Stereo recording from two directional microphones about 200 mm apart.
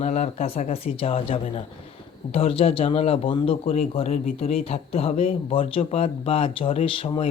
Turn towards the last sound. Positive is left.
turn(degrees=30)  # may be behind; listen again after turning